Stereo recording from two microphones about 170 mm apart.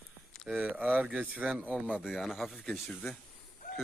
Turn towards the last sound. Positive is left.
turn(degrees=0)  # may be behind; listen again after turning